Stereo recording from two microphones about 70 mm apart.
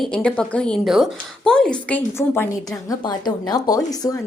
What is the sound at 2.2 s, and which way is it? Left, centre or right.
Speech, left.